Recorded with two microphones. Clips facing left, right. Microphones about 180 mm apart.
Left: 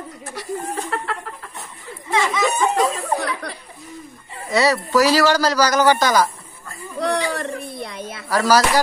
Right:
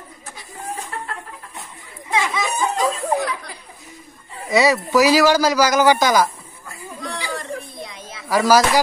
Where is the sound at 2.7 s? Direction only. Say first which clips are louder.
Even; 65° left (ahead or behind).